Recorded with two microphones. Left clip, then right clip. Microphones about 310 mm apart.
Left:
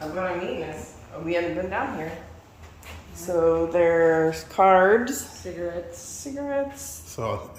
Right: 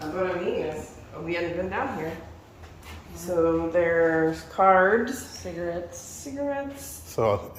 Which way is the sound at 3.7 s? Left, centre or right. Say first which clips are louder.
Left 2 dB; left.